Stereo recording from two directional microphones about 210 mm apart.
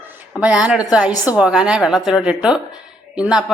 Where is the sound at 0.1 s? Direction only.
5° right (ahead or behind).